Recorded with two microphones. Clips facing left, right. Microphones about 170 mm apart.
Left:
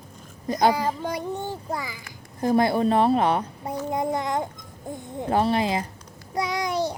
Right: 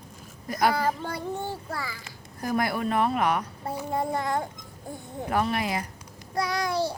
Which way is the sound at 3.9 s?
20° left (ahead or behind).